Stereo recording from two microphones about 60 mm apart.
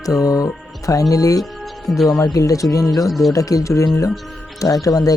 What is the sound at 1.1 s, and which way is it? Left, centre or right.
Speech, left.